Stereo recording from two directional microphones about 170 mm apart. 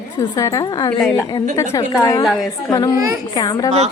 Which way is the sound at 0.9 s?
5° left (ahead or behind).